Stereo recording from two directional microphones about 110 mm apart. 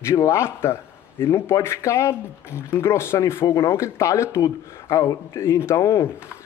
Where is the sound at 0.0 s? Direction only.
25° left (ahead or behind).